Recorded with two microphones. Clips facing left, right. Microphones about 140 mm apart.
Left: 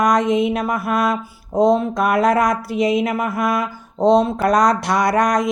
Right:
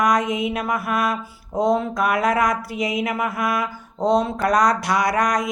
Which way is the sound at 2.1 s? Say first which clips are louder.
Left 4 dB; 35° left (ahead or behind).